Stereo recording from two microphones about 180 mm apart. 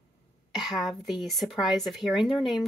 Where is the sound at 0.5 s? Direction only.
Centre (ahead or behind).